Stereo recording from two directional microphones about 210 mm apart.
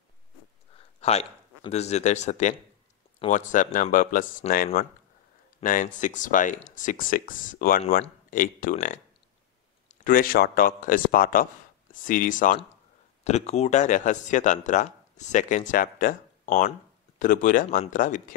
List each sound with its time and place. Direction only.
1.0 s speech: 30° left (ahead or behind)
5.6 s speech: 40° left (ahead or behind)